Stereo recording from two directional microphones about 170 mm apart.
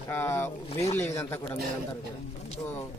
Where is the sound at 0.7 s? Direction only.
40° left (ahead or behind).